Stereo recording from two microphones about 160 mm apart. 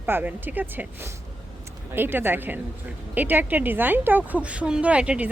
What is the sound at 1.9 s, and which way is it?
Speech, 15° right (ahead or behind).